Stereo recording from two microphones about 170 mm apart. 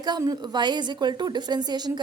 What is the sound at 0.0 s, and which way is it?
A woman's voice, 25° right (ahead or behind).